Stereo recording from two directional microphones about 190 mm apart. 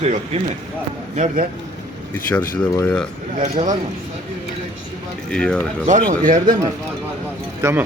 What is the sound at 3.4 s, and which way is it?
Speech, 35° right (ahead or behind).